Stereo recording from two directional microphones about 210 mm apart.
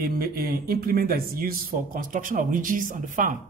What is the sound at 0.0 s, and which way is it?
Speech, 45° right (ahead or behind).